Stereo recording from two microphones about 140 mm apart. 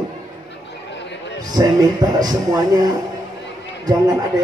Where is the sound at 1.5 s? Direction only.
25° right (ahead or behind).